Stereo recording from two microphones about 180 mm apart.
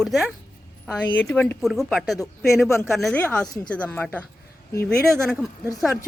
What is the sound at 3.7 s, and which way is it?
A woman's voice, 5° left (ahead or behind).